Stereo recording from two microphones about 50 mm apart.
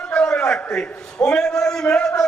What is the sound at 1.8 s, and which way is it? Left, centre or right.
Speech, left.